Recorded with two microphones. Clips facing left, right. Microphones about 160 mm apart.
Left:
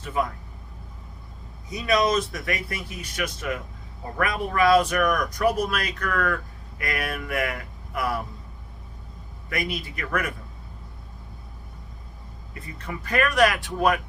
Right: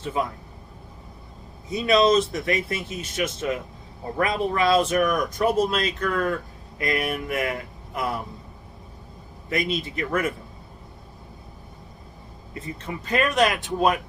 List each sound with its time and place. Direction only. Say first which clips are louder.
0.0 s speech: even; 25° right (ahead or behind)
1.7 s speech: right 4 dB; 25° right (ahead or behind)
9.5 s speech: right 4 dB; 25° right (ahead or behind)
12.5 s speech: right 3 dB; 25° right (ahead or behind)